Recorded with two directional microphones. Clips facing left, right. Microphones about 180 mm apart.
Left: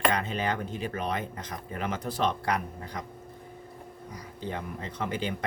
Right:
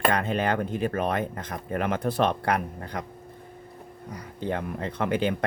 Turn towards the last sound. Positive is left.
turn(degrees=-60)  # may be behind; listen again after turning